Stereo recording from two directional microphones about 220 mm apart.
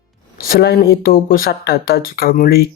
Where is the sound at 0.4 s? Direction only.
45° left (ahead or behind).